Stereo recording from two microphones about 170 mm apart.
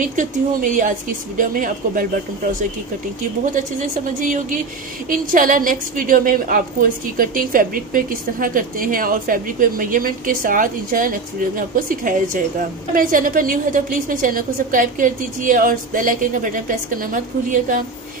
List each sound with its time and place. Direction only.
0.0 s a woman's voice: 50° right (ahead or behind)
3.5 s a woman's voice: 50° right (ahead or behind)